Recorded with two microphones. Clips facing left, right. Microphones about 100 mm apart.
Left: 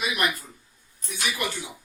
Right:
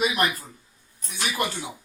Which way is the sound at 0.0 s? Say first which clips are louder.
Right 4 dB; 35° right (ahead or behind).